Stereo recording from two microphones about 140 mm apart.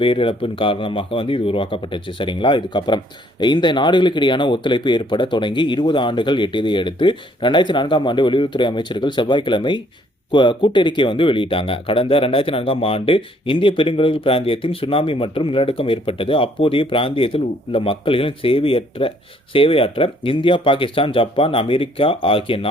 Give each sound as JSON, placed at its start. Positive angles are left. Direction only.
{"t": 0.0, "sound": "speech", "side_deg": 40}